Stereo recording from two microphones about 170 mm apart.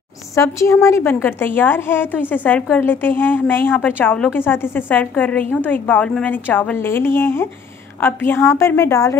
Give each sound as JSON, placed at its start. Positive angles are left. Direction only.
{"t": 0.4, "sound": "a woman's voice", "side_deg": 15}